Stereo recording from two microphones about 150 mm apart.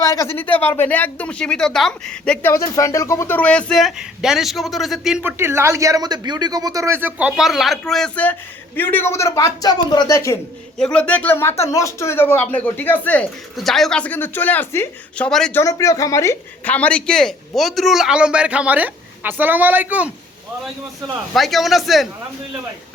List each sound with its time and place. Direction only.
0.0 s speech: 20° left (ahead or behind)
2.5 s speech: 20° left (ahead or behind); by 5.2 s centre (ahead or behind)
5.2 s speech: 15° right (ahead or behind); by 10.3 s 20° left (ahead or behind)
10.8 s speech: 5° left (ahead or behind)
15.3 s speech: 5° left (ahead or behind)
15.5 s speech: 20° left (ahead or behind)
16.7 s a man's voice: 10° left (ahead or behind); by 20.1 s 10° right (ahead or behind)
21.3 s speech: centre (ahead or behind)